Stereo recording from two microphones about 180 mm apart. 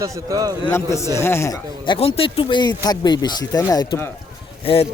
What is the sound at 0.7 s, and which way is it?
Speech, 15° left (ahead or behind).